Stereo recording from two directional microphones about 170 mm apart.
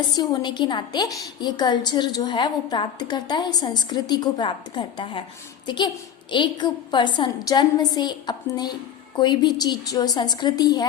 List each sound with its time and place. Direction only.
0.1 s a woman's voice: 25° left (ahead or behind)